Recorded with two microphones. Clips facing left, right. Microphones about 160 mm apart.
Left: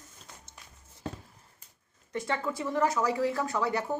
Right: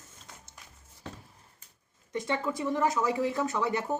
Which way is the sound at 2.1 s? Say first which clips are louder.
Right 1 dB; 20° right (ahead or behind).